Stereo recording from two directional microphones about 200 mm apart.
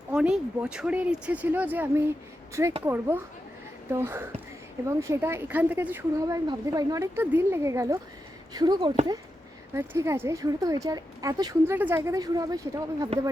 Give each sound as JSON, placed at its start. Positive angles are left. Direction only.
{"t": 0.1, "sound": "speech", "side_deg": -5}